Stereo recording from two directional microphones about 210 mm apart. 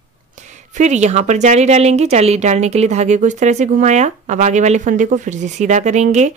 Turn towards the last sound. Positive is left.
turn(degrees=-35)  # may be behind; listen again after turning